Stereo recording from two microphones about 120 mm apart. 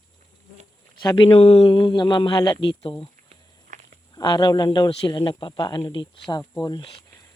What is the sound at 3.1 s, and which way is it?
Walk, 90° right.